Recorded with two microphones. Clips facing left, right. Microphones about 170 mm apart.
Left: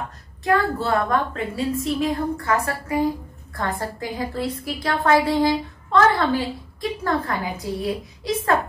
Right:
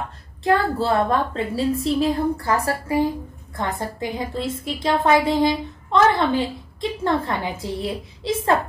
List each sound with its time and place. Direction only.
0.4 s a woman's voice: 30° right (ahead or behind)